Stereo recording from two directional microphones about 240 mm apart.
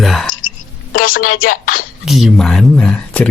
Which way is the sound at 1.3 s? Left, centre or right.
Left.